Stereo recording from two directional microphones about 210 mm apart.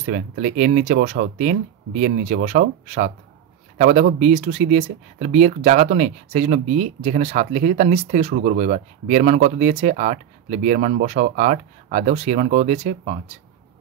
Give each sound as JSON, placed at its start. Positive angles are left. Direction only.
{"t": 0.0, "sound": "speech", "side_deg": -40}